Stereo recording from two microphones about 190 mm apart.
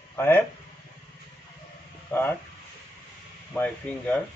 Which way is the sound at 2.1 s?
10° left (ahead or behind).